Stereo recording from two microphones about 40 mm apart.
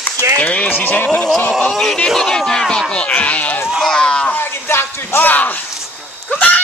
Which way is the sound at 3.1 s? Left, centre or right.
Left.